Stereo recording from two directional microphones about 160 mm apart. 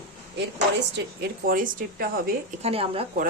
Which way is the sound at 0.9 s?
80° right.